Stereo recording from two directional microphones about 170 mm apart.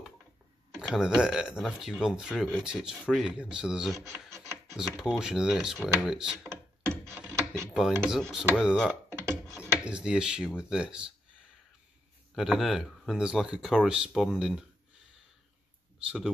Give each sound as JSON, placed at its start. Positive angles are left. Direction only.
{"t": 0.7, "sound": "speech", "side_deg": -5}
{"t": 7.2, "sound": "a sound", "side_deg": -15}
{"t": 7.7, "sound": "speech", "side_deg": 0}
{"t": 9.2, "sound": "a sound", "side_deg": 5}
{"t": 9.7, "sound": "speech", "side_deg": -5}
{"t": 12.4, "sound": "speech", "side_deg": 0}